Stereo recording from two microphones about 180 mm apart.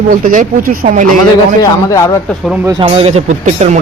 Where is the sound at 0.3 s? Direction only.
50° right (ahead or behind).